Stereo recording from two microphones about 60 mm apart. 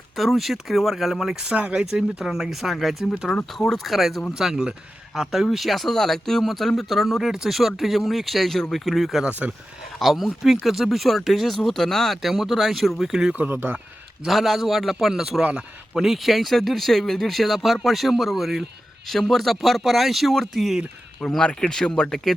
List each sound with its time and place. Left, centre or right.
0.2 s speech: centre
13.3 s speech: right
14.3 s speech: centre
15.4 s speech: centre
21.2 s speech: centre